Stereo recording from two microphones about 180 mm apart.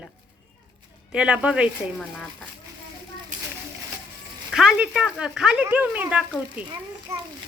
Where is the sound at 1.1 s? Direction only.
5° right (ahead or behind).